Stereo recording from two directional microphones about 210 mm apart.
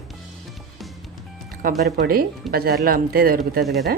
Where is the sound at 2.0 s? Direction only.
45° right (ahead or behind).